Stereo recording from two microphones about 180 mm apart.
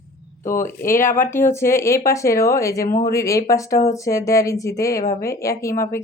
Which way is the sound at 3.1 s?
15° left (ahead or behind).